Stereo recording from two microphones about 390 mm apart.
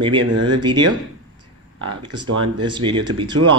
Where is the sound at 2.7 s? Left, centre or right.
Centre.